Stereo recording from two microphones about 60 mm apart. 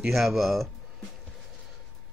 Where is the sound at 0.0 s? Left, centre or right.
Centre.